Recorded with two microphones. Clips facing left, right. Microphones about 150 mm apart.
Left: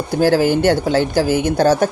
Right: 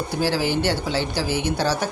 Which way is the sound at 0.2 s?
50° left (ahead or behind).